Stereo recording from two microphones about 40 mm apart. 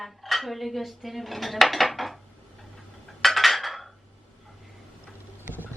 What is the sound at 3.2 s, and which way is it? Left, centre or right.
Cutlery, centre.